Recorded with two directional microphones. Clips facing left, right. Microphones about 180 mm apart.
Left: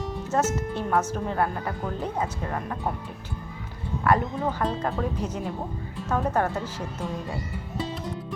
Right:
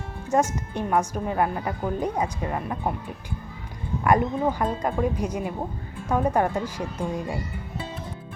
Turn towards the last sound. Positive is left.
turn(degrees=-10)  # may be behind; listen again after turning